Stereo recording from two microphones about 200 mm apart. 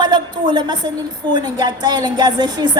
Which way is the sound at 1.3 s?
20° right (ahead or behind).